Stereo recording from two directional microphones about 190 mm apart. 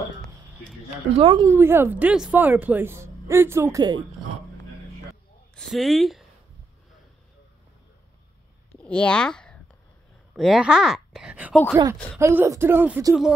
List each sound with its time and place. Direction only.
1.1 s a woman's voice: 25° right (ahead or behind)
1.5 s a woman's voice: 10° right (ahead or behind)
5.6 s speech: centre (ahead or behind)
8.8 s a woman's voice: 5° left (ahead or behind)